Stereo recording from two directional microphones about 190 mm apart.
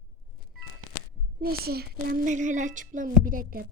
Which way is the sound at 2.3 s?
40° right (ahead or behind).